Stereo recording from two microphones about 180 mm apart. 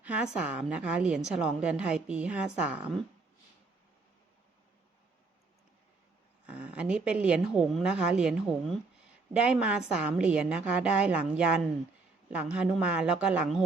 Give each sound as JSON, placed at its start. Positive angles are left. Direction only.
{"t": 0.0, "sound": "a woman's voice", "side_deg": -5}
{"t": 6.4, "sound": "a woman's voice", "side_deg": -5}